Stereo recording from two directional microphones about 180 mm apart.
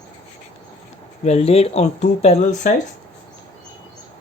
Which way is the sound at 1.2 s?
35° left (ahead or behind).